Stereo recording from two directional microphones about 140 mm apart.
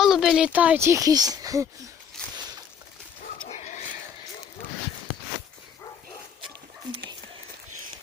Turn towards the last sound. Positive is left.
turn(degrees=-35)  # may be behind; listen again after turning